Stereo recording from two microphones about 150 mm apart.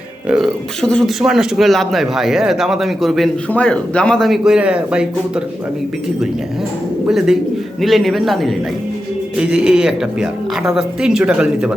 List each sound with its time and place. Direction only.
0.3 s speech: centre (ahead or behind)
7.1 s speech: 5° right (ahead or behind)